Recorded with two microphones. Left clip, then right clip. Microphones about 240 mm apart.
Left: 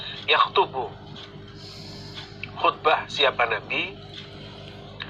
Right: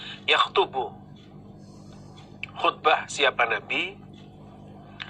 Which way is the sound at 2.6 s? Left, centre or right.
Right.